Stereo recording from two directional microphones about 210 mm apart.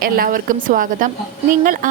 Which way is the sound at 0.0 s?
40° right (ahead or behind).